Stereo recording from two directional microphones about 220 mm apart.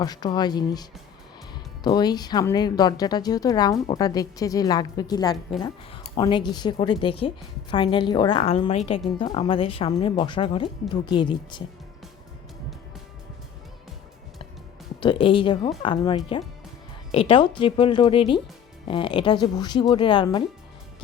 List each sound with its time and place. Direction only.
0.0 s a woman's voice: 20° left (ahead or behind)
15.0 s speech: 25° left (ahead or behind)